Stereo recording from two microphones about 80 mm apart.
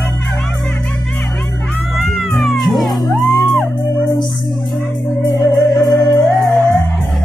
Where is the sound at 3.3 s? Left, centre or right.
Left.